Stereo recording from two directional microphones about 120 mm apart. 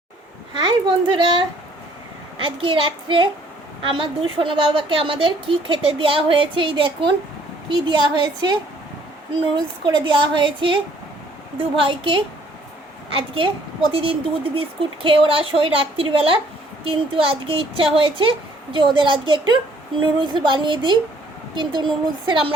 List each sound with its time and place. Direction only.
0.5 s a woman's voice: 40° right (ahead or behind)
9.8 s a woman's voice: 40° right (ahead or behind)
11.9 s a woman's voice: 45° right (ahead or behind)